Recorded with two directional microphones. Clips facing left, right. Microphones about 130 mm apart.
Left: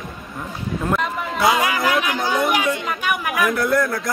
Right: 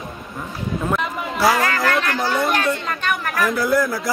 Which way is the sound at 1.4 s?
15° left (ahead or behind).